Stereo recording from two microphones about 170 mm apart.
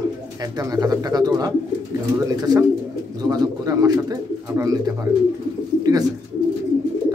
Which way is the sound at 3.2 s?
20° right (ahead or behind).